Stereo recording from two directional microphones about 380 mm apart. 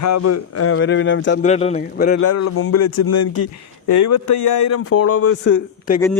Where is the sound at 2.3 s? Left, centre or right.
Left.